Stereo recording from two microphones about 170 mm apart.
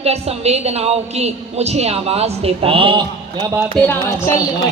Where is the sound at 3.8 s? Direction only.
10° left (ahead or behind).